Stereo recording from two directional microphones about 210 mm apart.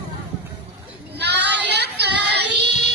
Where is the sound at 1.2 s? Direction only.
55° right (ahead or behind).